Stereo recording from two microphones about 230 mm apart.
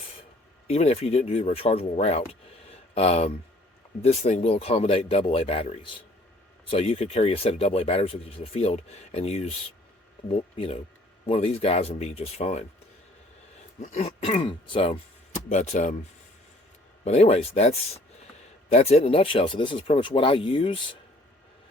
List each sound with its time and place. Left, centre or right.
0.7 s speech: left
13.8 s speech: left
17.0 s speech: left